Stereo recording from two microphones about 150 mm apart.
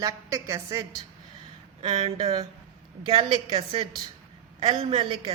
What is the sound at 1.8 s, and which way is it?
A woman's voice, 35° right (ahead or behind).